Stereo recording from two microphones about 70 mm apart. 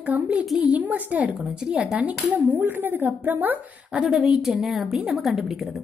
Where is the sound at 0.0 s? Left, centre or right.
Right.